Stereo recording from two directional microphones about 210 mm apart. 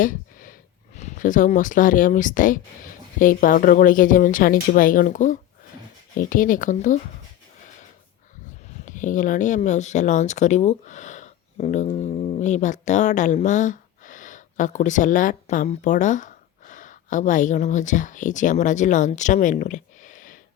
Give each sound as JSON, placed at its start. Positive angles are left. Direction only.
{"t": 0.0, "sound": "a sound", "side_deg": 40}
{"t": 0.9, "sound": "speech", "side_deg": 35}
{"t": 8.8, "sound": "speech", "side_deg": 35}